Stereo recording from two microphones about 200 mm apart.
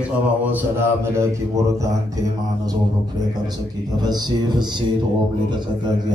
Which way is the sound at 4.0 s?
20° right (ahead or behind).